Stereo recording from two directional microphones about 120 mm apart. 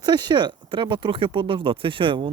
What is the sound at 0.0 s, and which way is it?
Speech, 35° right (ahead or behind).